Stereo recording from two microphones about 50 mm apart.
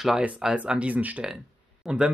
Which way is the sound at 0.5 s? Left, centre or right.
Right.